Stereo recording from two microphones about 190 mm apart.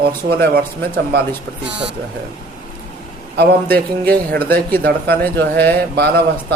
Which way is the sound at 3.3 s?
55° right (ahead or behind).